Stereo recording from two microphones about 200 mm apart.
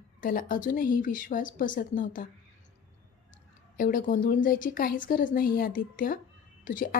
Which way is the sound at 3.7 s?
45° left (ahead or behind).